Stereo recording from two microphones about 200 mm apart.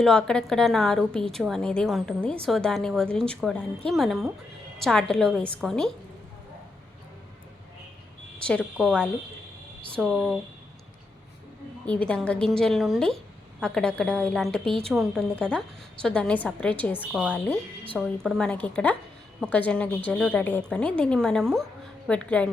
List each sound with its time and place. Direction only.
0.0 s a woman's voice: 5° left (ahead or behind)
8.4 s a woman's voice: 5° left (ahead or behind)
11.9 s a woman's voice: 5° left (ahead or behind)
17.0 s a woman's voice: 5° right (ahead or behind)